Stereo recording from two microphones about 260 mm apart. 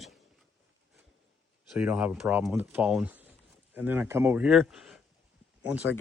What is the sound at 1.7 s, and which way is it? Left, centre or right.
Speech, centre.